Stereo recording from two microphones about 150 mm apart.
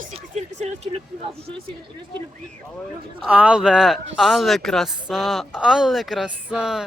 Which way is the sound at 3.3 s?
10° right (ahead or behind).